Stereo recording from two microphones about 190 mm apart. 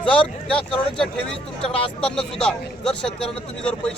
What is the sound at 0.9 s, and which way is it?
A man's voice, 5° left (ahead or behind).